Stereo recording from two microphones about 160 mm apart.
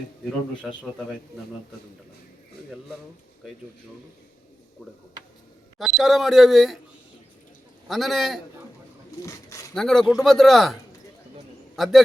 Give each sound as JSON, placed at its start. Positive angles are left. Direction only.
{"t": 5.8, "sound": "speech", "side_deg": 0}
{"t": 7.9, "sound": "speech", "side_deg": 0}
{"t": 9.2, "sound": "speech", "side_deg": 20}
{"t": 9.7, "sound": "speech", "side_deg": 5}
{"t": 11.8, "sound": "speech", "side_deg": 0}